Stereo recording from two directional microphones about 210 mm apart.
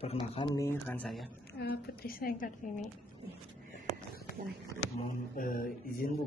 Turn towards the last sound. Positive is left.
turn(degrees=40)  # may be behind; listen again after turning